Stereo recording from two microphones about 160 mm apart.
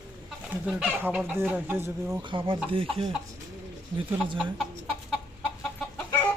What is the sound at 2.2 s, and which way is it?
Speech, 30° right (ahead or behind).